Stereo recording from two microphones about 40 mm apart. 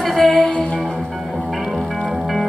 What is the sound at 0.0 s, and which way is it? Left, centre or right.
Music, centre.